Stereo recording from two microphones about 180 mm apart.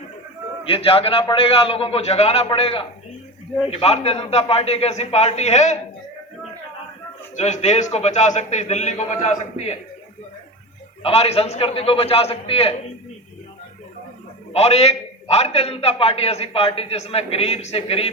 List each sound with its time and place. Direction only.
0.7 s a man's voice: 30° left (ahead or behind)
7.3 s a man's voice: 40° left (ahead or behind)
11.0 s a man's voice: 35° left (ahead or behind)
14.5 s a man's voice: 35° left (ahead or behind)